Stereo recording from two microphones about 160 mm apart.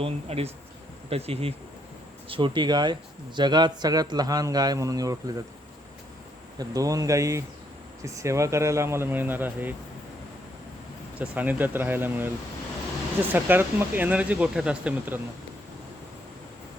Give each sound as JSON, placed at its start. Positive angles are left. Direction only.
{"t": 0.0, "sound": "speech", "side_deg": -40}
{"t": 6.6, "sound": "speech", "side_deg": -20}
{"t": 11.2, "sound": "speech", "side_deg": -10}
{"t": 13.3, "sound": "speech", "side_deg": -10}